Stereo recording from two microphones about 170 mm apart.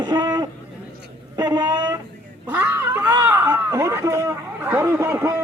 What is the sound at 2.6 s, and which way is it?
Speech, 10° right (ahead or behind).